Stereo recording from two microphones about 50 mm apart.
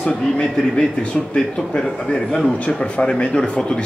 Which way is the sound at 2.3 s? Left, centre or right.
Centre.